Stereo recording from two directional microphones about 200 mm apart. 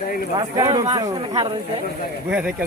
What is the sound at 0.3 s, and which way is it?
Speech, 20° right (ahead or behind).